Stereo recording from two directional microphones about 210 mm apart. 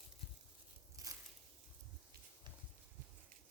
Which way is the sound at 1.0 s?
15° right (ahead or behind).